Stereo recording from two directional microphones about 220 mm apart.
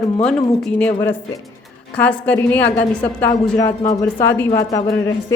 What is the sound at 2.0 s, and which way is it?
Speech, 10° left (ahead or behind).